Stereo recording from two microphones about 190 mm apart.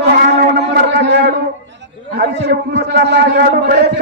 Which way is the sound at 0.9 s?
65° right (ahead or behind).